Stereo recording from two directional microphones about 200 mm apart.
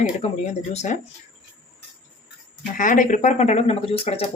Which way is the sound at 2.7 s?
40° left (ahead or behind).